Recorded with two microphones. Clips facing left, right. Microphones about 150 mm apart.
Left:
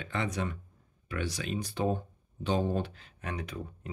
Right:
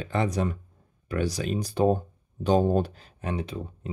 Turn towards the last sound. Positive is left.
turn(degrees=-30)  # may be behind; listen again after turning